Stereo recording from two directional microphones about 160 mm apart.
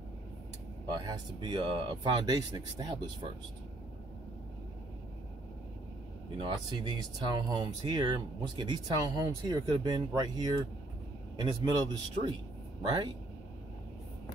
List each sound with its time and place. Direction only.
0.8 s speech: 25° right (ahead or behind)
6.3 s speech: 30° right (ahead or behind)